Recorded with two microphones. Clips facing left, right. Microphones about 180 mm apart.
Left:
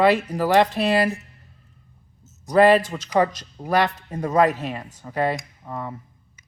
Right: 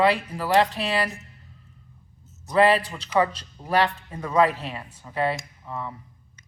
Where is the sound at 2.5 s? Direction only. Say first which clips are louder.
Left 4 dB; 45° left (ahead or behind).